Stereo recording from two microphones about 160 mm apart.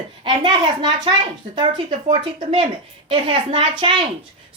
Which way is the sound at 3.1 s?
30° right (ahead or behind).